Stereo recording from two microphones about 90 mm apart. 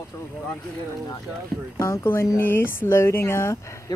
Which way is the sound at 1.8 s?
35° left (ahead or behind).